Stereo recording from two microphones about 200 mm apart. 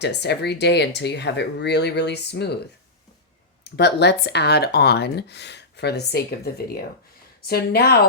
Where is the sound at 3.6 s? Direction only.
55° left (ahead or behind).